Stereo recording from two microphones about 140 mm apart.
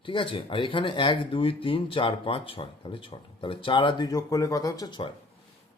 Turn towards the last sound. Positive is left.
turn(degrees=30)  # may be behind; listen again after turning